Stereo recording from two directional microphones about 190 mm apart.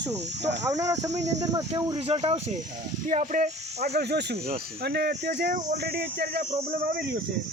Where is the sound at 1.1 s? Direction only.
35° right (ahead or behind).